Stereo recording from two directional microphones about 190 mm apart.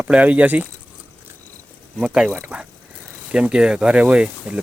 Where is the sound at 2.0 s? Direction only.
Centre (ahead or behind).